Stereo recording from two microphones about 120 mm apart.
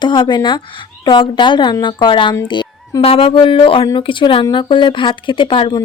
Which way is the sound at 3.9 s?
40° left (ahead or behind).